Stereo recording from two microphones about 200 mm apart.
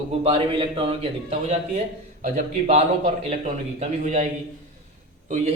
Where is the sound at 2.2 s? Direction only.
40° right (ahead or behind).